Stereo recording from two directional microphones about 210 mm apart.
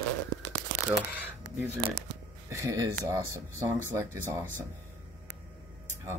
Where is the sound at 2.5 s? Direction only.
15° right (ahead or behind).